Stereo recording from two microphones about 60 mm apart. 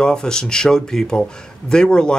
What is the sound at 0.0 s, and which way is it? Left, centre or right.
Speech, centre.